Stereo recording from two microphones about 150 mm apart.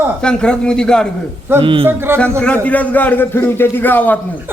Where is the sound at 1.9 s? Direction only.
15° right (ahead or behind).